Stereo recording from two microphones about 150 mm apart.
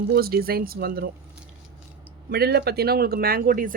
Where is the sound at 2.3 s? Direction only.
90° right; by 3.7 s 70° right (ahead or behind).